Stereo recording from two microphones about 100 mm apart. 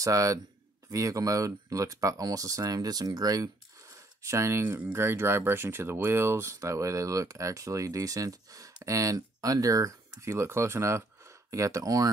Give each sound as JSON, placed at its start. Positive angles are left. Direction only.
{"t": 0.0, "sound": "speech", "side_deg": -35}
{"t": 4.6, "sound": "speech", "side_deg": -15}